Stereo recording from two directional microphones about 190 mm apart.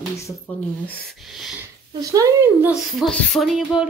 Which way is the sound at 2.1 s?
15° right (ahead or behind).